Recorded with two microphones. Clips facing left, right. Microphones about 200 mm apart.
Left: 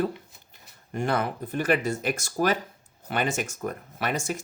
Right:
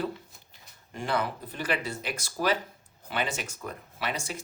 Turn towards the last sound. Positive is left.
turn(degrees=45)  # may be behind; listen again after turning